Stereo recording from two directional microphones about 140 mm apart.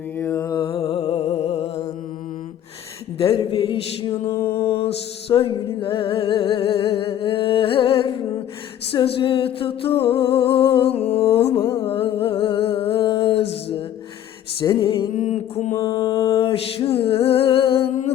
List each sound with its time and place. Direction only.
0.2 s music: 20° left (ahead or behind); by 1.9 s 45° left (ahead or behind)
3.2 s a sound: 40° left (ahead or behind)
4.3 s music: 20° left (ahead or behind)
5.3 s music: 35° left (ahead or behind)
8.9 s a sound: 40° left (ahead or behind)
14.6 s music: 35° left (ahead or behind)
15.1 s a sound: 55° left (ahead or behind)
15.7 s mantra: 25° left (ahead or behind)
16.4 s music: 40° left (ahead or behind)